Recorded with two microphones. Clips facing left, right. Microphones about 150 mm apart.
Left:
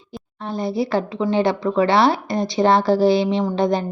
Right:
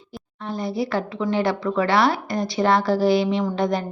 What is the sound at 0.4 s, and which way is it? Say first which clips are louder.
A woman's voice: left 3 dB; 25° left (ahead or behind).